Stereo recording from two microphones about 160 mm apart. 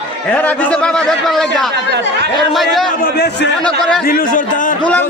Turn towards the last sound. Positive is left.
turn(degrees=55)  # may be behind; listen again after turning